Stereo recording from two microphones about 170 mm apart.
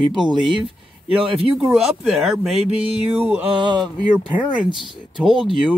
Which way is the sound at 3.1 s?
10° right (ahead or behind).